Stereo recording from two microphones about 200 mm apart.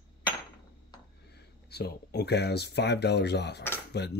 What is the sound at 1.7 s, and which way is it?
Speech, 55° left (ahead or behind).